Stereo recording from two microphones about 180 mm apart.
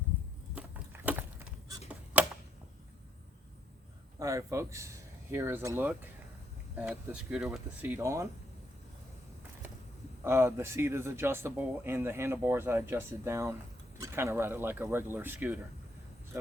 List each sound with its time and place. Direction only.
0.5 s a sound: 10° right (ahead or behind)
4.2 s speech: 15° right (ahead or behind)
10.2 s speech: 15° right (ahead or behind)